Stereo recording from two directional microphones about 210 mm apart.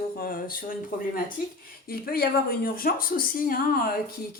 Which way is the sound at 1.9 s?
45° left (ahead or behind).